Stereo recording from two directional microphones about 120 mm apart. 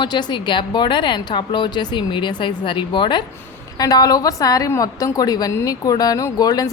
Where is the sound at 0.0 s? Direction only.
40° left (ahead or behind).